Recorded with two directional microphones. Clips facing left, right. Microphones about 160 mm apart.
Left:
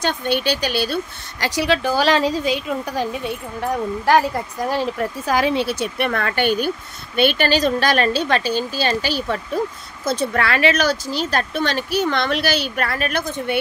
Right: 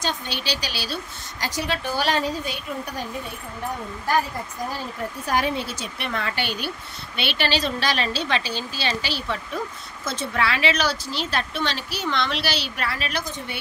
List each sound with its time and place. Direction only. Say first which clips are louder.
0.0 s speech: left 8 dB; 55° left (ahead or behind)
1.4 s a woman's voice: left 8 dB; 80° left; by 13.6 s 55° left (ahead or behind)